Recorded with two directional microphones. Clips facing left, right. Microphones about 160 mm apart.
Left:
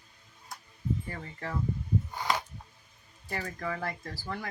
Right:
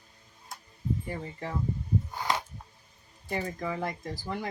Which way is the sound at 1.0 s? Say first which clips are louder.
Right 3 dB; 20° right (ahead or behind).